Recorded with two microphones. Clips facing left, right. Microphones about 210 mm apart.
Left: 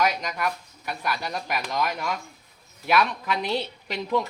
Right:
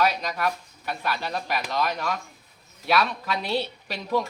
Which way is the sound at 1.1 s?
15° left (ahead or behind).